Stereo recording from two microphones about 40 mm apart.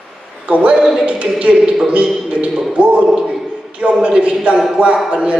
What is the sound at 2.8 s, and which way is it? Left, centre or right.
A man's voice, right.